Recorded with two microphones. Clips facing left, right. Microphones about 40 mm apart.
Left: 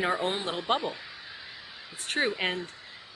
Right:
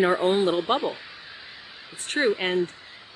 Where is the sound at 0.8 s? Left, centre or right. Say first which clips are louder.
Right 5 dB; right.